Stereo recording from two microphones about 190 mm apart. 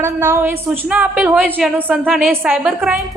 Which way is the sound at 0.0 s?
15° right (ahead or behind).